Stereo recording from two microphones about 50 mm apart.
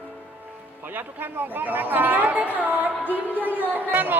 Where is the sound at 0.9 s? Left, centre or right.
Right.